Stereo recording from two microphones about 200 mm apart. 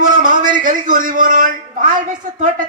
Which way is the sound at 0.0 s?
40° right (ahead or behind).